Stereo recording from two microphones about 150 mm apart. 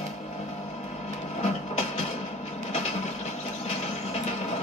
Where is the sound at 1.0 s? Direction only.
50° left (ahead or behind).